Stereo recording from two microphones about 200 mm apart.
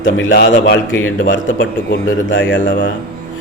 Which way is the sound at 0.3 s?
60° left (ahead or behind).